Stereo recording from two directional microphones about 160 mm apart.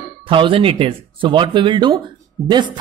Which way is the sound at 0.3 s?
35° right (ahead or behind).